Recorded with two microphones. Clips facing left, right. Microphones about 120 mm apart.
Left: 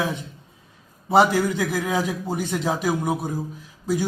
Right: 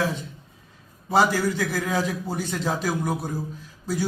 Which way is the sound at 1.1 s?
20° left (ahead or behind).